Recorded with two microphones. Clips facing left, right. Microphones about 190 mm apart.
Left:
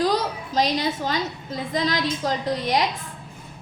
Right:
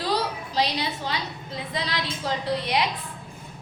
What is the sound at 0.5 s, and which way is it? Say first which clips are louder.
A woman's voice: left 5 dB; 45° left (ahead or behind).